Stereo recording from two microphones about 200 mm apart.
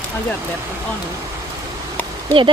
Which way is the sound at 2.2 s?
25° right (ahead or behind).